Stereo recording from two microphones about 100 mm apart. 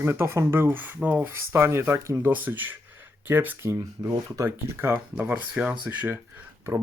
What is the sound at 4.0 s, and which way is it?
Speech, 35° right (ahead or behind).